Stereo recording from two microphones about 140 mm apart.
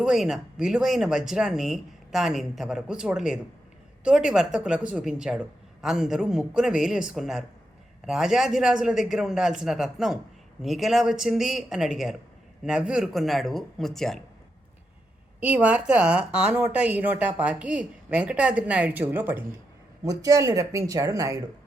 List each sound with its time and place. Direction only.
0.0 s a woman's voice: 5° right (ahead or behind)
15.4 s a woman's voice: 10° right (ahead or behind)
20.1 s speech: 25° right (ahead or behind)